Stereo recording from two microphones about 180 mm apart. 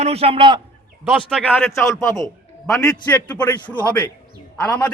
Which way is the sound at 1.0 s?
Centre (ahead or behind).